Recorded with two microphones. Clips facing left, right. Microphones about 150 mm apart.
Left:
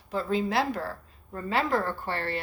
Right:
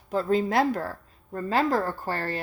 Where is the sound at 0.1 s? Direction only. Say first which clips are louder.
Right 4 dB; 45° right (ahead or behind).